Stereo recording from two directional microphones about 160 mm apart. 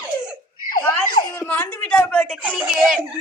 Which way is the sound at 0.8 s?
25° left (ahead or behind).